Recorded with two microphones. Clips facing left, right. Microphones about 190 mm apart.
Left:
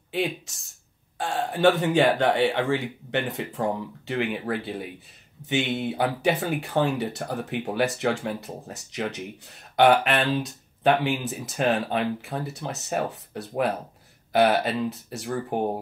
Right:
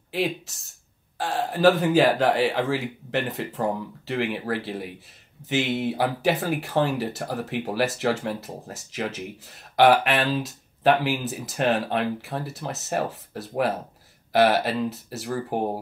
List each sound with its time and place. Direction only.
0.1 s speech: centre (ahead or behind)